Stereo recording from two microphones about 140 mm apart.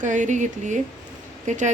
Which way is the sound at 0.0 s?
60° right (ahead or behind).